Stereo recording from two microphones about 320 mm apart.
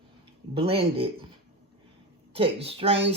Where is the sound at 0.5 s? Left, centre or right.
Centre.